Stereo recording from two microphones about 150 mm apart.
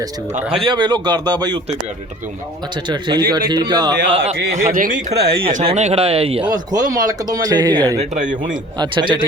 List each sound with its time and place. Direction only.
0.5 s speech: 30° right (ahead or behind)
2.9 s speech: 30° right (ahead or behind)
4.7 s speech: 65° right (ahead or behind)
5.6 s speech: 45° right (ahead or behind)
6.5 s speech: 25° right (ahead or behind)
7.9 s speech: 55° right (ahead or behind)
8.8 s speech: 30° right (ahead or behind)